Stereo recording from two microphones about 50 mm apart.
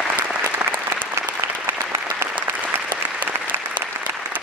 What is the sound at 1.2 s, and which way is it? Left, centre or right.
Applause, right.